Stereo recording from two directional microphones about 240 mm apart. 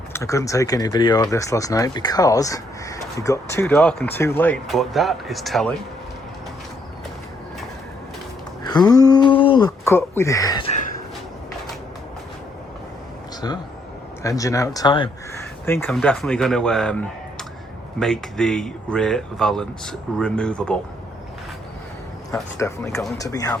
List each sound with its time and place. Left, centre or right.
0.1 s speech: centre
8.6 s speech: centre
13.4 s speech: centre
15.6 s speech: centre
22.3 s speech: centre